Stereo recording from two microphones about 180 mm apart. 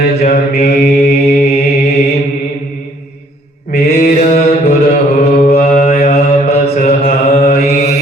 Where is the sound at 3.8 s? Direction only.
40° left (ahead or behind).